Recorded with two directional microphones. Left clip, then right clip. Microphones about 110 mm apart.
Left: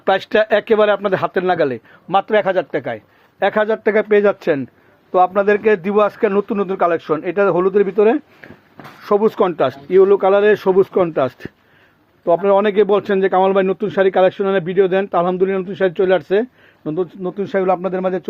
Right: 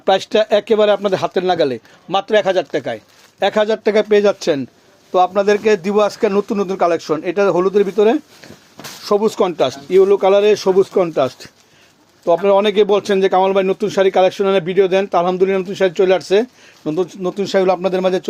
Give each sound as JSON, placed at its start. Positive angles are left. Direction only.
{"t": 0.0, "sound": "speech", "side_deg": -10}
{"t": 17.3, "sound": "speech", "side_deg": -30}